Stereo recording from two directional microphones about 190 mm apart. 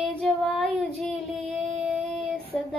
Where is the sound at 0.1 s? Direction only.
5° left (ahead or behind).